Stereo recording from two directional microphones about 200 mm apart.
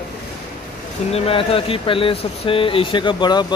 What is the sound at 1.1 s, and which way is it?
Speech, 30° left (ahead or behind).